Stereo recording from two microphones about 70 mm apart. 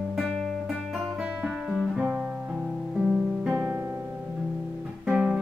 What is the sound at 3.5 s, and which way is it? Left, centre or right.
Music, right.